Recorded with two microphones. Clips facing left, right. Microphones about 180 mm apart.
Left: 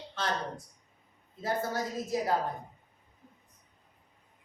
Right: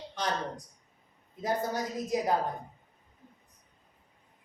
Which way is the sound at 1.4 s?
15° right (ahead or behind).